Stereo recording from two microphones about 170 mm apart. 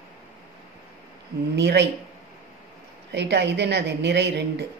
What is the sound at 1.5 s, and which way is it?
Speech, 90° right.